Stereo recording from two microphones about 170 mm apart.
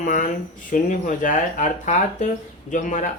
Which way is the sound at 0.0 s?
50° left (ahead or behind).